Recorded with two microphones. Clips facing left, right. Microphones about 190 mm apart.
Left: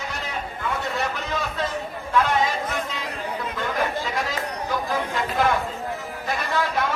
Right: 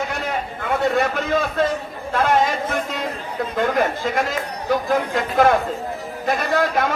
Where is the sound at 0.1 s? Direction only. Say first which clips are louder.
Right 6 dB; 60° right (ahead or behind).